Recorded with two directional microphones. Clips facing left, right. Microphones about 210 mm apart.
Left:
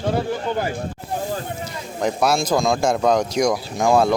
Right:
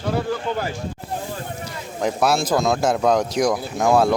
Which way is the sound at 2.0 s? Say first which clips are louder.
Even; centre (ahead or behind).